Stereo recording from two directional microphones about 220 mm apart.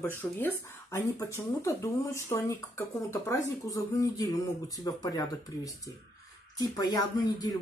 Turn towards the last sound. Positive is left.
turn(degrees=15)  # may be behind; listen again after turning